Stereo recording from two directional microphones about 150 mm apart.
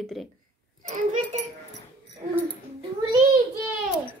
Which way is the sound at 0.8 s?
60° right (ahead or behind).